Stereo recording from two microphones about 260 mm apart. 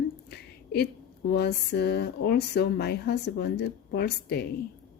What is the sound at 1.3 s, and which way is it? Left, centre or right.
Speech, left.